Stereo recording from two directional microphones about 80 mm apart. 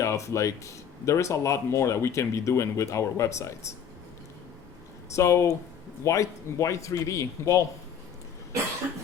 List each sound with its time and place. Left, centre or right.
0.0 s speech: left
5.1 s speech: left